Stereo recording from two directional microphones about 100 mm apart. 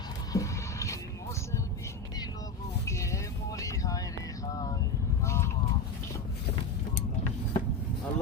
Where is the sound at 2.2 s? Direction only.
35° left (ahead or behind).